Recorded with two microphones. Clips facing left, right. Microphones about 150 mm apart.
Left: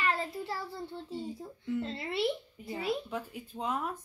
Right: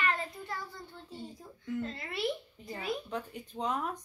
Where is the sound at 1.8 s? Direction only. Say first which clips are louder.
Left 5 dB; 25° left (ahead or behind).